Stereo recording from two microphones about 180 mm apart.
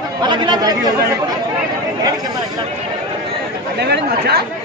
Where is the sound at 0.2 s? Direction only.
25° right (ahead or behind).